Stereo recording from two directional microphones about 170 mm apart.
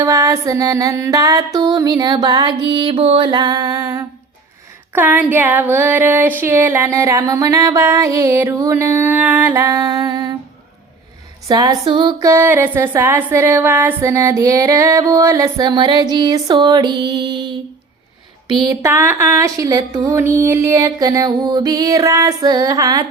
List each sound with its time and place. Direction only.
0.0 s music: 20° right (ahead or behind)
11.4 s music: 20° right (ahead or behind)
12.3 s music: 10° right (ahead or behind)
18.6 s music: 20° right (ahead or behind)